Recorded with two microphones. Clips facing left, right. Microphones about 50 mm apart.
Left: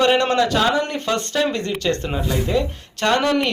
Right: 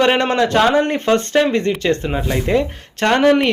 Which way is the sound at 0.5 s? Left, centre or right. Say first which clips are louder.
Right 5 dB; right.